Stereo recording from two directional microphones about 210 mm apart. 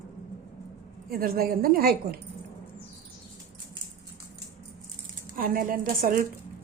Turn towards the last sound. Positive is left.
turn(degrees=-40)  # may be behind; listen again after turning